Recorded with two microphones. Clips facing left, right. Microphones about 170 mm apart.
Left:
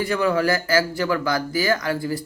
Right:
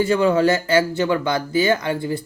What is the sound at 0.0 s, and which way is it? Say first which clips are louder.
Speech: right 4 dB; 25° right (ahead or behind).